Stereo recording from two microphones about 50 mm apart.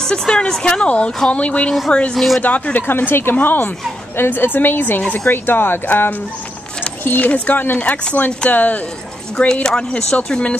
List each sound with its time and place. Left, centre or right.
0.0 s speech: centre
2.1 s speech: centre
2.4 s speech: left
2.9 s a woman's voice: left
9.5 s speech: centre